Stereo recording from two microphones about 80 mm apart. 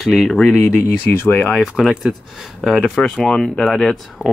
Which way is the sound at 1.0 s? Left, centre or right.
Left.